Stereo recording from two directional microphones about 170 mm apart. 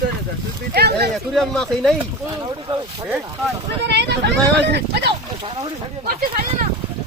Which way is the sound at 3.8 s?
90° right.